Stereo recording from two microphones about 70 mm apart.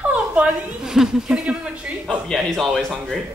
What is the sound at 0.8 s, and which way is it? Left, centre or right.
A woman's voice, centre.